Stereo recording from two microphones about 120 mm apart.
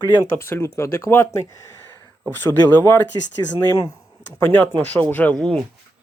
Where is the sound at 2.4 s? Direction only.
15° left (ahead or behind).